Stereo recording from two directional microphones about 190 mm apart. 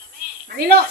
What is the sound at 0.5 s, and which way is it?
Speech, 55° right (ahead or behind).